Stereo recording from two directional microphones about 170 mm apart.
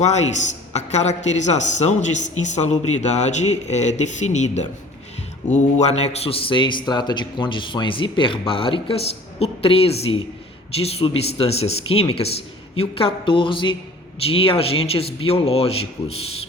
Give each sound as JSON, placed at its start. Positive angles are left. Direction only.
{"t": 0.0, "sound": "a man's voice", "side_deg": 40}